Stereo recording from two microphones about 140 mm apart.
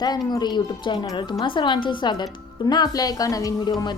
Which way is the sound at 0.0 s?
30° left (ahead or behind).